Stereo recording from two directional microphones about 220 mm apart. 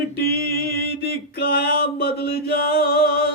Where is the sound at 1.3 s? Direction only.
45° left (ahead or behind).